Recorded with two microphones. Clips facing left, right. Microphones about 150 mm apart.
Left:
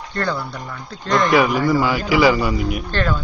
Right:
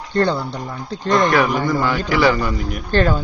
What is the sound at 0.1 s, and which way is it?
Speech, 25° right (ahead or behind).